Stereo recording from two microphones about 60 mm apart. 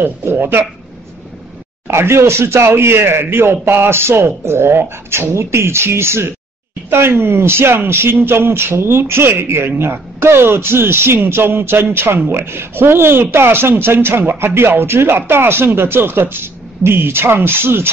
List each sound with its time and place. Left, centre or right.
0.0 s speech: right
1.9 s speech: right